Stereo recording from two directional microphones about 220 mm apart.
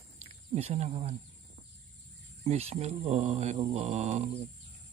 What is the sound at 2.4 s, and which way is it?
Speech, 30° right (ahead or behind).